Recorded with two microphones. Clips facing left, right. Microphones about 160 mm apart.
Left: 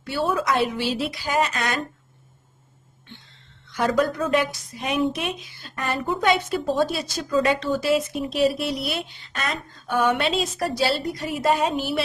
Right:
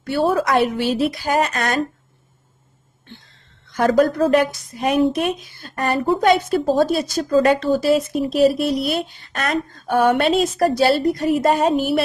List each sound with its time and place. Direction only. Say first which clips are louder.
0.0 s a woman's voice: right 6 dB; 55° right (ahead or behind)
3.7 s a woman's voice: right 6 dB; 45° right (ahead or behind)
9.3 s a woman's voice: right 7 dB; 55° right (ahead or behind)